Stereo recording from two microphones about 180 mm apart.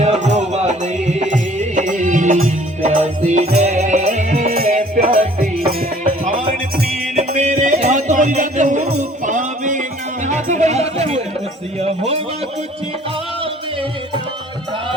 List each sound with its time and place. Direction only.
0.0 s music: 40° right (ahead or behind)